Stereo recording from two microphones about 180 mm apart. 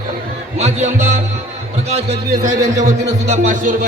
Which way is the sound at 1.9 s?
35° right (ahead or behind).